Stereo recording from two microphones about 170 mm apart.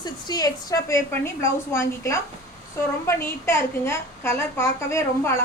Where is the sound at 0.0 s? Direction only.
25° left (ahead or behind).